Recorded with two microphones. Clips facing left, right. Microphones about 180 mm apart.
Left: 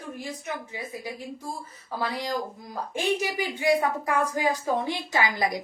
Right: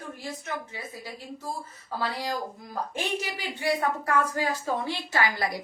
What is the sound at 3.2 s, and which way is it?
A woman's voice, 15° left (ahead or behind).